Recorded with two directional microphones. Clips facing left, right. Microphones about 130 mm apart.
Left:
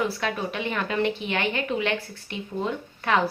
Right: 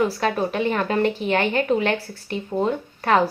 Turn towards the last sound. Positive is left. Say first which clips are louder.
# right 5 dB
turn(degrees=-40)  # may be behind; listen again after turning